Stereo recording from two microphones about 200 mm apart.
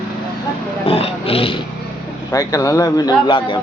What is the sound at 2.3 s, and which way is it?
Speech, 15° left (ahead or behind).